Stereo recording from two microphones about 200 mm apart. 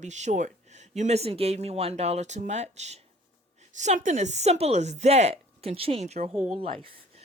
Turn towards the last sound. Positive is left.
turn(degrees=-25)  # may be behind; listen again after turning